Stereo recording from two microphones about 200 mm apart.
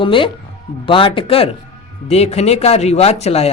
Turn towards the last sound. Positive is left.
turn(degrees=30)  # may be behind; listen again after turning